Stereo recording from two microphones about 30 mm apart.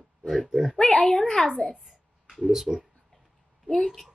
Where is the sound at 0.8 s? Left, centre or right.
Centre.